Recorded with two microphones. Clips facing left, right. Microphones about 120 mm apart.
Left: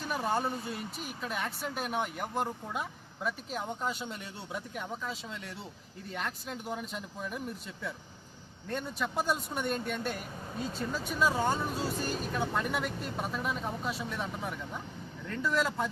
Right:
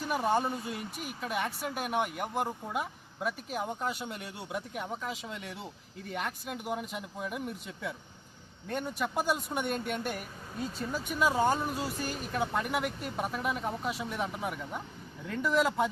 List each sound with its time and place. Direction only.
0.1 s speech: 10° right (ahead or behind)
9.6 s speech: 65° right (ahead or behind)
9.9 s speech: 15° right (ahead or behind)